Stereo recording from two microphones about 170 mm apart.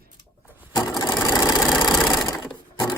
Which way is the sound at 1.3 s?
25° left (ahead or behind).